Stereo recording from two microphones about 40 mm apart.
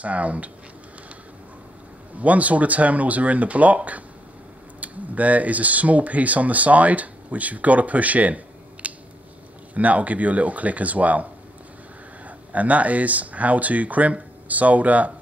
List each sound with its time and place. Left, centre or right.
0.0 s speech: right
2.1 s speech: right
8.8 s a sound: right
9.8 s speech: right
12.5 s speech: right